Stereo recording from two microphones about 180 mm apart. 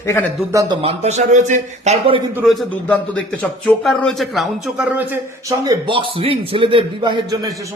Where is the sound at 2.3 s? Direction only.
Centre (ahead or behind).